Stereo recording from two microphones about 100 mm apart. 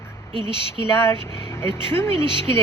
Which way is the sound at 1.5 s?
25° left (ahead or behind).